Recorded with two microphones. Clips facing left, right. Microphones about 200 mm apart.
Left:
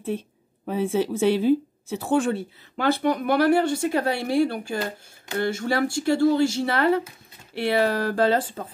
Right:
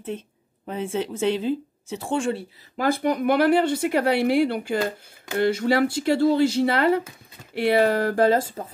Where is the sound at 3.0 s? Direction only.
20° right (ahead or behind).